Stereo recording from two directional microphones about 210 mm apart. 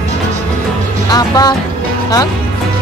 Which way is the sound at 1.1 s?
20° left (ahead or behind).